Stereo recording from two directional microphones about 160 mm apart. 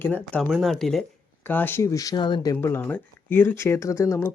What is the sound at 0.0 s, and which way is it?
Speech, 10° left (ahead or behind).